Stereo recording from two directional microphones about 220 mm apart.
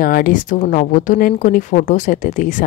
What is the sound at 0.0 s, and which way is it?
Speech, 40° left (ahead or behind).